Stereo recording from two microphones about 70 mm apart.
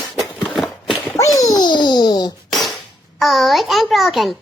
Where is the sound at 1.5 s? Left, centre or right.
Left.